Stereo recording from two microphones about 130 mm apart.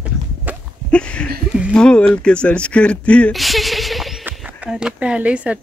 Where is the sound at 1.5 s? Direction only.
10° right (ahead or behind).